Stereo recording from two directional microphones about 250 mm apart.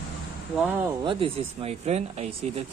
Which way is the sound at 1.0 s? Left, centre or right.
Right.